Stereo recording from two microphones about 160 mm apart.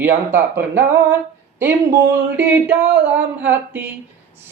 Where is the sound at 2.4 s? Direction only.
10° right (ahead or behind).